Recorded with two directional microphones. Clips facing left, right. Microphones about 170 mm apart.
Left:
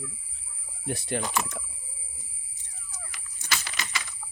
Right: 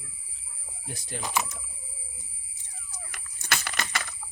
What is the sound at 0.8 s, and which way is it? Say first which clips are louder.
Speech: left 9 dB; 65° left (ahead or behind).